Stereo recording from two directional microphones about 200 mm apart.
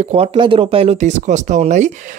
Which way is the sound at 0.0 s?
30° right (ahead or behind).